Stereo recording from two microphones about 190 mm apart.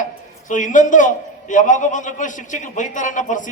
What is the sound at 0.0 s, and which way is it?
Speech, 40° left (ahead or behind).